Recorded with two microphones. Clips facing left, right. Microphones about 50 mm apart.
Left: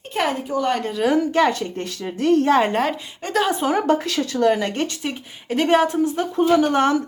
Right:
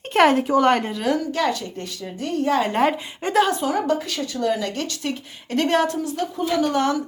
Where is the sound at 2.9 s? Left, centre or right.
Centre.